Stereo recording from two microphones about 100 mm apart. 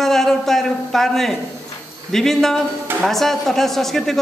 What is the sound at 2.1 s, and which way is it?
A man's voice, 5° left (ahead or behind).